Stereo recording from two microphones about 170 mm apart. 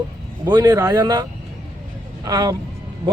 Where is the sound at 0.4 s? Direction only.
25° right (ahead or behind).